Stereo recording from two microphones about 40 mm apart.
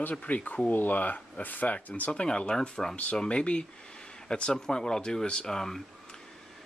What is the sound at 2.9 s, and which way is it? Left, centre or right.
Speech, left.